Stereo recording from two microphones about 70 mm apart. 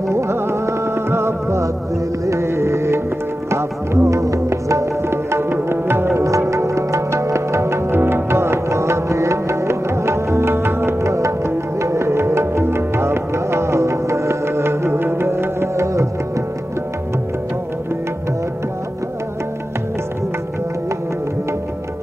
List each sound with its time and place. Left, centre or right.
0.1 s music: right